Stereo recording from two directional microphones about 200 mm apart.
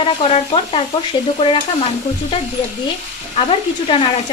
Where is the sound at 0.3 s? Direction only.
30° left (ahead or behind).